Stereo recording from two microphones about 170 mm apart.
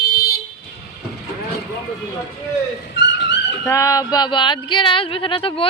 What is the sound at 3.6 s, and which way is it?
Speech, 20° left (ahead or behind).